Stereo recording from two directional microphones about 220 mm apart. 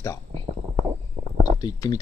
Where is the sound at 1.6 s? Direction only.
20° left (ahead or behind).